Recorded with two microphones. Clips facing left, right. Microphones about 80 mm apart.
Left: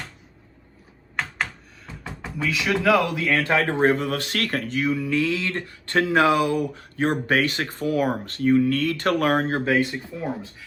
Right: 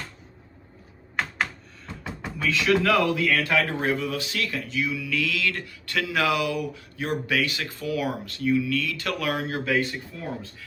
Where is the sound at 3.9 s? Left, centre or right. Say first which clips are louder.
Left 3 dB; left.